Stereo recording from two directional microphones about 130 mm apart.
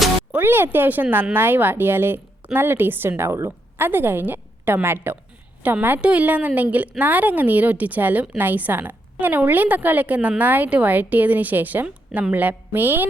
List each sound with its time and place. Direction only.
0.3 s a woman's voice: 15° right (ahead or behind)